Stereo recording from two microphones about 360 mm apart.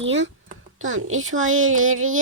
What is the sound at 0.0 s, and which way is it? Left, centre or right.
Speech, right.